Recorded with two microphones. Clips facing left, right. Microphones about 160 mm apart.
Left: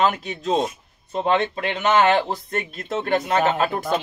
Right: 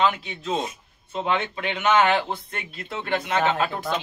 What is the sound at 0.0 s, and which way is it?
Speech, 45° left (ahead or behind).